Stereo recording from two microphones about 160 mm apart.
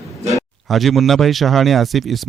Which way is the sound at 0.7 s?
Centre (ahead or behind).